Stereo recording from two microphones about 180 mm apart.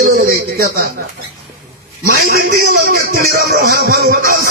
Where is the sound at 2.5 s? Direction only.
65° right (ahead or behind).